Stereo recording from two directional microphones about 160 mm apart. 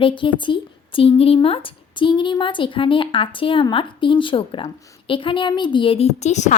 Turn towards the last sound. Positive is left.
turn(degrees=45)  # may be behind; listen again after turning